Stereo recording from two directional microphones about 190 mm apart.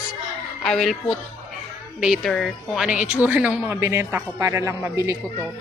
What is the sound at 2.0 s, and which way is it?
A woman's voice, centre (ahead or behind).